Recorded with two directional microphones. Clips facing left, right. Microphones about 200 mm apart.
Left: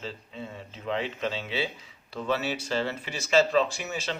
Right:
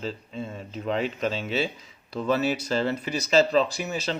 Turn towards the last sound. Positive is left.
turn(degrees=-40)  # may be behind; listen again after turning